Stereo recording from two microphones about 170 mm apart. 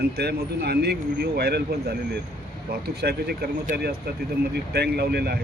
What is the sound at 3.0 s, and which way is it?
Speech, 65° right (ahead or behind).